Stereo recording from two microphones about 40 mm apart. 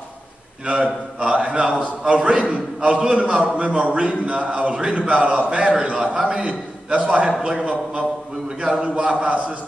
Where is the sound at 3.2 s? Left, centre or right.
Right.